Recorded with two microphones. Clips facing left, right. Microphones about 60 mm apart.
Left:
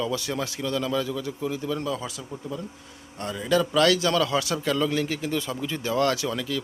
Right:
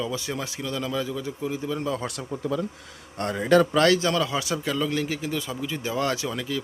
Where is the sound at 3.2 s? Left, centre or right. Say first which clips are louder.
Right 4 dB; right.